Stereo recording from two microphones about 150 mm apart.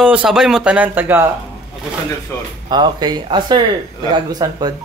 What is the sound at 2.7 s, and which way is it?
Speech, 30° right (ahead or behind).